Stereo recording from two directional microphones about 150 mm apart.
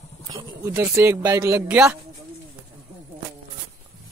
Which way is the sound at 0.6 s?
20° right (ahead or behind).